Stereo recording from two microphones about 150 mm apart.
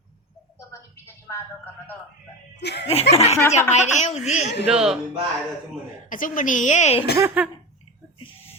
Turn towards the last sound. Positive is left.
turn(degrees=-10)  # may be behind; listen again after turning